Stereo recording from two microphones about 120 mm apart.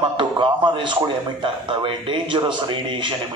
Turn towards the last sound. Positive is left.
turn(degrees=-40)  # may be behind; listen again after turning